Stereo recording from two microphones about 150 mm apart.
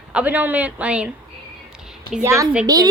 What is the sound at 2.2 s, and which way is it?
Speech, 20° right (ahead or behind).